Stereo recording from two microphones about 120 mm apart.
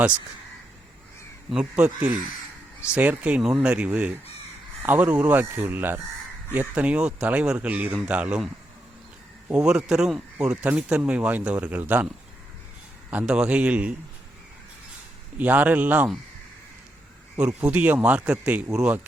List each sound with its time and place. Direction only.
1.5 s speech: 5° right (ahead or behind)
9.5 s speech: 5° right (ahead or behind)
13.1 s speech: 10° right (ahead or behind)
15.4 s speech: 15° right (ahead or behind)
17.7 s speech: 15° right (ahead or behind)